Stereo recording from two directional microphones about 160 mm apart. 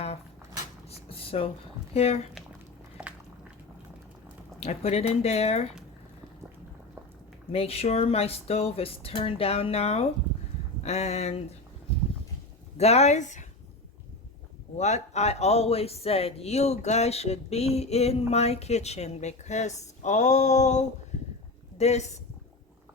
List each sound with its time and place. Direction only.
0.9 s a sound: 35° left (ahead or behind)
1.9 s speech: 40° left (ahead or behind)
3.0 s a sound: 5° right (ahead or behind)
4.6 s speech: 40° left (ahead or behind)
7.5 s speech: 40° left (ahead or behind)
12.7 s speech: 40° left (ahead or behind)
14.8 s speech: 45° left (ahead or behind)